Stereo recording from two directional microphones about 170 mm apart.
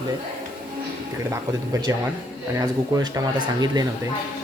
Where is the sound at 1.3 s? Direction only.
20° right (ahead or behind).